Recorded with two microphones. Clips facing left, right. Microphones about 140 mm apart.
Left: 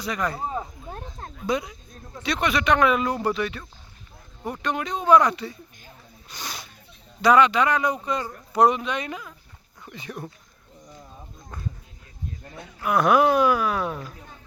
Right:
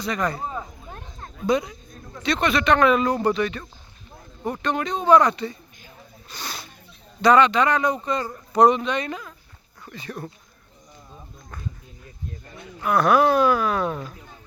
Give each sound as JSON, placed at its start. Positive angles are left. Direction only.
{"t": 0.0, "sound": "speech", "side_deg": 10}
{"t": 0.9, "sound": "a sound", "side_deg": 35}
{"t": 1.5, "sound": "speech", "side_deg": 5}
{"t": 6.2, "sound": "snake", "side_deg": 15}
{"t": 7.2, "sound": "speech", "side_deg": 5}
{"t": 12.8, "sound": "speech", "side_deg": 15}